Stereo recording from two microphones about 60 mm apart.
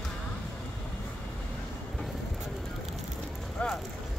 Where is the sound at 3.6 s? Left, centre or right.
Left.